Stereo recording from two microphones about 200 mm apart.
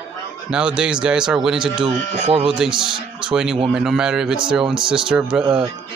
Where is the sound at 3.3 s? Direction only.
5° right (ahead or behind).